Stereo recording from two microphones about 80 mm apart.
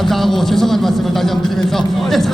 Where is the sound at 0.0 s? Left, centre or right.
Centre.